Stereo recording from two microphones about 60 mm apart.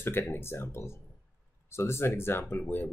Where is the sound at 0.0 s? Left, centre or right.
Left.